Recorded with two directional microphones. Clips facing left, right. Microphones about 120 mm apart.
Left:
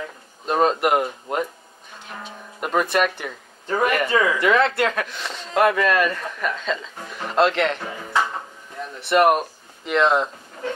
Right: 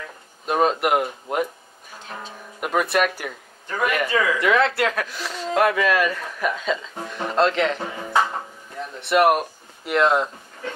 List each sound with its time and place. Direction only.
0.5 s speech: 5° right (ahead or behind)
3.6 s speech: 40° left (ahead or behind)
4.1 s speech: 30° left (ahead or behind)
4.4 s speech: centre (ahead or behind)
9.0 s speech: centre (ahead or behind)